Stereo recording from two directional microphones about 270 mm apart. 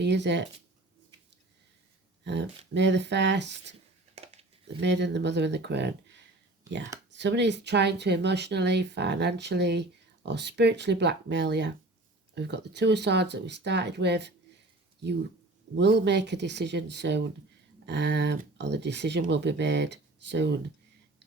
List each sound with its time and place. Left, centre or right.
0.0 s speech: right
2.2 s speech: right
4.8 s speech: right
15.7 s speech: right